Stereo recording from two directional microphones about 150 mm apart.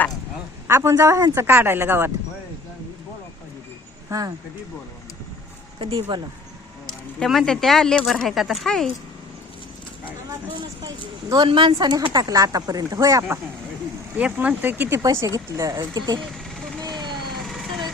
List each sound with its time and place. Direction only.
0.7 s speech: 20° right (ahead or behind)
4.1 s speech: 25° right (ahead or behind)
5.8 s speech: 35° right (ahead or behind)
7.2 s speech: centre (ahead or behind)
10.5 s speech: 35° right (ahead or behind)
14.2 s speech: 10° right (ahead or behind); by 16.2 s 25° right (ahead or behind)
16.2 s a sound: 5° left (ahead or behind)
16.8 s a sound: 30° right (ahead or behind)